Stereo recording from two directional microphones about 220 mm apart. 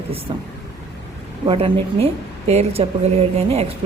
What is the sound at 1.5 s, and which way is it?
Speech, 25° right (ahead or behind).